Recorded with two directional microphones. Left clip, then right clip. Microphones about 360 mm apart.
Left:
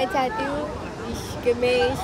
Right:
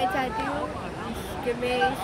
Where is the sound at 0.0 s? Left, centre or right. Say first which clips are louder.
Left 3 dB; left.